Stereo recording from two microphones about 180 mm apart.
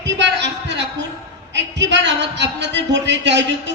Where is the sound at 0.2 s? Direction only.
75° right (ahead or behind).